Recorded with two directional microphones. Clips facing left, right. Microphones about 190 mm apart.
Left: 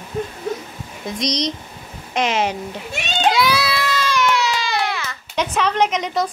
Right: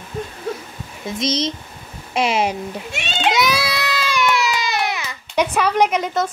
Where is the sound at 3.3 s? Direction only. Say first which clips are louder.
Left 1 dB; 25° right (ahead or behind).